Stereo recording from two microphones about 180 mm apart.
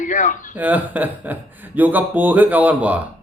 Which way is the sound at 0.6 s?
10° right (ahead or behind).